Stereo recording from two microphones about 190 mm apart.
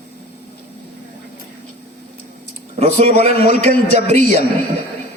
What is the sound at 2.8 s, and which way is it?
Speech, 35° right (ahead or behind).